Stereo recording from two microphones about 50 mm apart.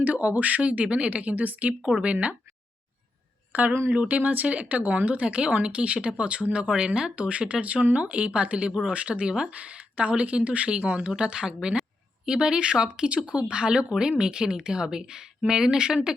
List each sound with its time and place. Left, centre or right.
0.0 s speech: right
3.5 s a woman's voice: right; by 16.0 s centre